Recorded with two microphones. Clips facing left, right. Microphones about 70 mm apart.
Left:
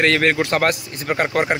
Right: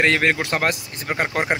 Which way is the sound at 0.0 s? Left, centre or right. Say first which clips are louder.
Left 2 dB; centre.